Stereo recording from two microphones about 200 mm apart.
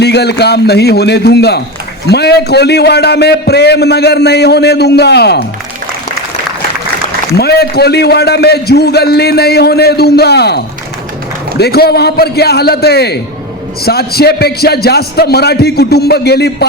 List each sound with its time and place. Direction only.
0.0 s a man's voice: 55° left (ahead or behind)
7.3 s a man's voice: 55° left (ahead or behind)